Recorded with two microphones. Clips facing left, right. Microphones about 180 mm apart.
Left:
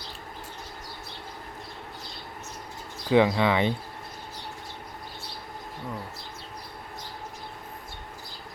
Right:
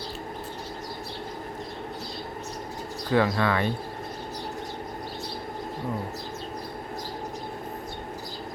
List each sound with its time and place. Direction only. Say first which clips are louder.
3.1 s speech: left 2 dB; 15° left (ahead or behind)